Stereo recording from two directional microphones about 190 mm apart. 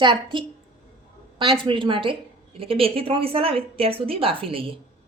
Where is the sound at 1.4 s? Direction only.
25° right (ahead or behind).